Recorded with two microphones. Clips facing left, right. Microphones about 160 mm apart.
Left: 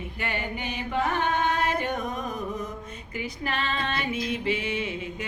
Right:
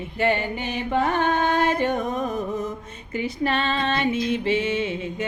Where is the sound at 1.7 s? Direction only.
30° right (ahead or behind).